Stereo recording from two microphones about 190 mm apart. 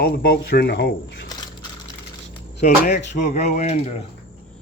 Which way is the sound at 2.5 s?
40° left (ahead or behind).